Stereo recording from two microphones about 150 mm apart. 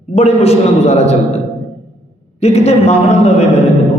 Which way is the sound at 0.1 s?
45° left (ahead or behind).